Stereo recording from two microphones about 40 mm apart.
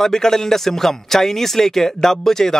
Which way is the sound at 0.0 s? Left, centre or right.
Centre.